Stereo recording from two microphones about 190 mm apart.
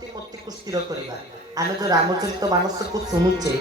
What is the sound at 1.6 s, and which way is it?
Music, 20° right (ahead or behind).